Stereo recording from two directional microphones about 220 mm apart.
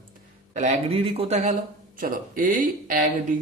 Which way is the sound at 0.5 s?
30° right (ahead or behind).